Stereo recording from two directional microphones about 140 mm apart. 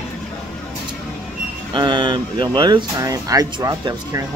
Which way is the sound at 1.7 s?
35° right (ahead or behind).